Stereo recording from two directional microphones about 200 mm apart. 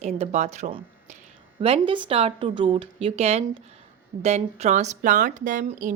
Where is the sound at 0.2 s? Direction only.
35° right (ahead or behind).